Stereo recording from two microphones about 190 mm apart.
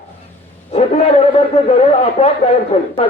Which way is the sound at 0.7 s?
35° left (ahead or behind).